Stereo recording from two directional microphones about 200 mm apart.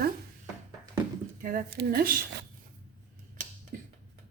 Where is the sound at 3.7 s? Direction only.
40° right (ahead or behind).